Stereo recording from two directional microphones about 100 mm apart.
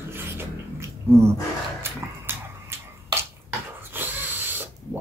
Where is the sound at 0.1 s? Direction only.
25° right (ahead or behind).